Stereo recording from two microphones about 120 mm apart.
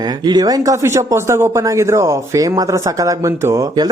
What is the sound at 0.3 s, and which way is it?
Speech, 35° right (ahead or behind).